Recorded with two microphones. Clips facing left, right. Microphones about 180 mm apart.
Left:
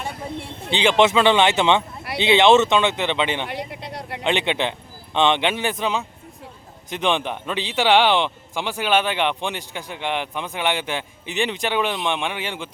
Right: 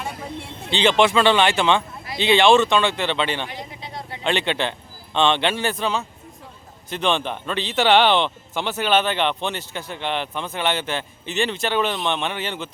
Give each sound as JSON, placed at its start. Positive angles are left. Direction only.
{"t": 0.7, "sound": "speech", "side_deg": 15}
{"t": 3.7, "sound": "vehicle", "side_deg": 65}
{"t": 4.2, "sound": "speech", "side_deg": 15}